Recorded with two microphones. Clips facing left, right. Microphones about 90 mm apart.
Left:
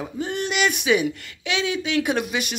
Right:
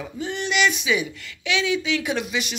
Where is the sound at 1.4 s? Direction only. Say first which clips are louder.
Right 1 dB; 40° left (ahead or behind).